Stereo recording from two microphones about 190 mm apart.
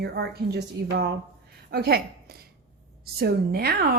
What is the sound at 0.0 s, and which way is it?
A woman's voice, 60° right (ahead or behind).